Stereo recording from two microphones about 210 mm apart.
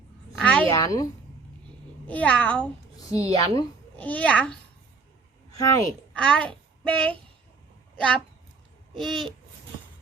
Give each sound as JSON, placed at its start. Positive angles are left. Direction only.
{"t": 0.3, "sound": "a sound", "side_deg": 5}
{"t": 0.7, "sound": "a woman's voice", "side_deg": 20}
{"t": 2.0, "sound": "a child's voice", "side_deg": 5}
{"t": 5.5, "sound": "speech", "side_deg": 15}
{"t": 6.1, "sound": "a woman's voice", "side_deg": 5}